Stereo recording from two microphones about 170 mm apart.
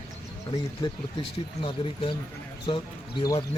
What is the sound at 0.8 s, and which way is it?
Speech, 25° left (ahead or behind).